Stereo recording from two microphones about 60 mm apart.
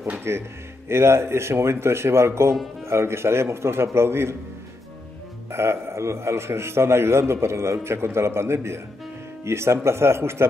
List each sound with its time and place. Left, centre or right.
0.3 s a man's voice: right
5.5 s a man's voice: right